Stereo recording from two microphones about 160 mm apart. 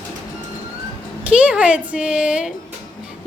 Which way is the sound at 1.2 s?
5° right (ahead or behind).